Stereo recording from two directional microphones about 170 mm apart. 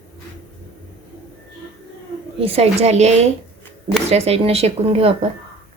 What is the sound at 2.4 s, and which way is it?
Speech, 35° right (ahead or behind).